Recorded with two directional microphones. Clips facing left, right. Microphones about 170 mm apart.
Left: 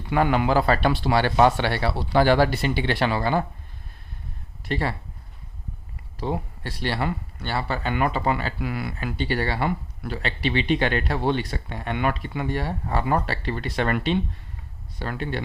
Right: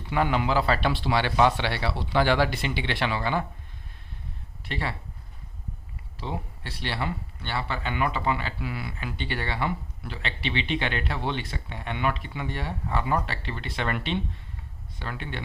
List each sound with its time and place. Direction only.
0.1 s speech: 50° left (ahead or behind)
4.6 s speech: 40° left (ahead or behind)
6.1 s speech: 45° left (ahead or behind)